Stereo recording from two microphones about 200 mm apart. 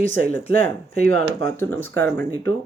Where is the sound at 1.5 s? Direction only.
10° left (ahead or behind).